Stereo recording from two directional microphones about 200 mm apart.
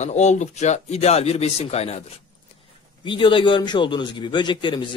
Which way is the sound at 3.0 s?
25° left (ahead or behind).